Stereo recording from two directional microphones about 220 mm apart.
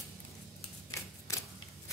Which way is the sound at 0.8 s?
15° left (ahead or behind).